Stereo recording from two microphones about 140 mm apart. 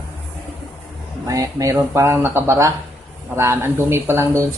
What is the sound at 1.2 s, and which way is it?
Speech, 25° right (ahead or behind).